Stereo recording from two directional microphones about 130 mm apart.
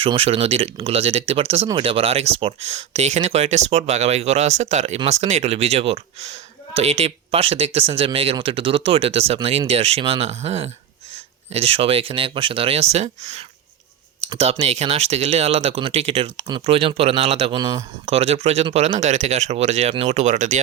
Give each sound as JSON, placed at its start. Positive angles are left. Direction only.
{"t": 0.0, "sound": "speech", "side_deg": -45}
{"t": 14.2, "sound": "computer keyboard", "side_deg": -55}
{"t": 14.6, "sound": "speech", "side_deg": -55}
{"t": 17.6, "sound": "speech", "side_deg": -25}
{"t": 18.0, "sound": "speech", "side_deg": -50}